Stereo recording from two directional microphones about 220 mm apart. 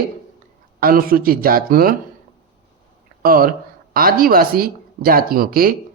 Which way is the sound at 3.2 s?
40° right (ahead or behind).